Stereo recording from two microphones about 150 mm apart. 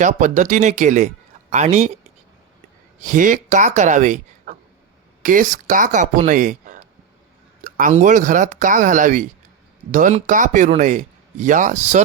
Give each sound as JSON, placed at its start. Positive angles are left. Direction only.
{"t": 0.0, "sound": "speech", "side_deg": -55}
{"t": 3.0, "sound": "speech", "side_deg": -60}